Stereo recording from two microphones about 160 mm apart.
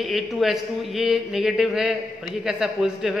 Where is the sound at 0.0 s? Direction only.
Centre (ahead or behind).